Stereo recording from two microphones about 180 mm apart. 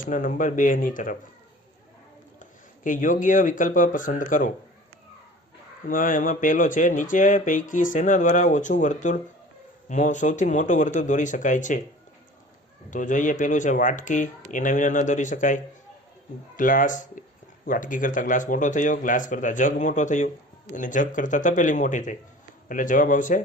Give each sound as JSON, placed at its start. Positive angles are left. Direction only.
{"t": 0.0, "sound": "speech", "side_deg": 45}
{"t": 2.4, "sound": "speech", "side_deg": 45}
{"t": 5.9, "sound": "speech", "side_deg": 50}
{"t": 12.9, "sound": "speech", "side_deg": 45}